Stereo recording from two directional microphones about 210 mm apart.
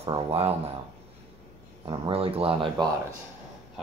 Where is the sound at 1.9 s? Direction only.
25° right (ahead or behind).